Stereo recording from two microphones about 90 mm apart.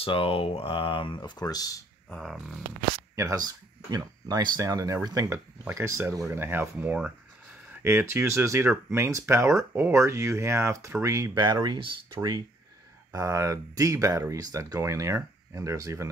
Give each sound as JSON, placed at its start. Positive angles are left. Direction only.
{"t": 0.0, "sound": "speech", "side_deg": 90}
{"t": 2.0, "sound": "speech", "side_deg": 5}
{"t": 3.2, "sound": "speech", "side_deg": -40}
{"t": 5.8, "sound": "speech", "side_deg": -25}
{"t": 11.3, "sound": "speech", "side_deg": -55}
{"t": 13.1, "sound": "speech", "side_deg": -40}